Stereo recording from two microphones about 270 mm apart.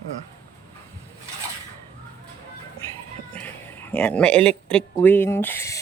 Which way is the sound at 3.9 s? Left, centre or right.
Centre.